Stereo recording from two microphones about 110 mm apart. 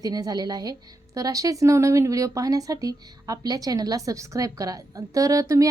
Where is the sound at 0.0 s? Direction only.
35° right (ahead or behind).